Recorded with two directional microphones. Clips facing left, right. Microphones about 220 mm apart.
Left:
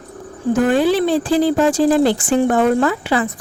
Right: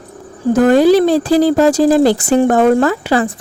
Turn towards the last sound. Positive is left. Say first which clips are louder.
# right 4 dB
turn(degrees=-40)  # may be behind; listen again after turning